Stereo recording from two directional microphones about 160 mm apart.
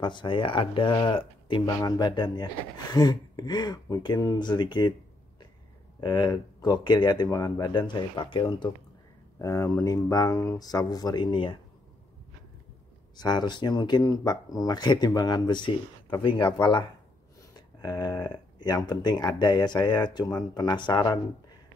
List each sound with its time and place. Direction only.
0.0 s speech: 30° left (ahead or behind)
5.9 s speech: 25° left (ahead or behind)
9.4 s speech: 20° left (ahead or behind)
13.1 s speech: 25° left (ahead or behind)